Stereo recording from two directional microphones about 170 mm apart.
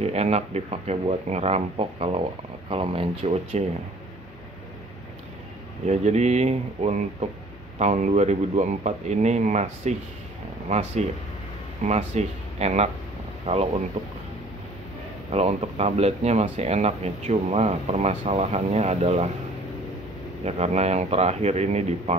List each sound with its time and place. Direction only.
0.0 s speech: 40° right (ahead or behind)
5.9 s speech: 40° right (ahead or behind)
15.3 s speech: 40° right (ahead or behind)
20.4 s speech: 40° right (ahead or behind)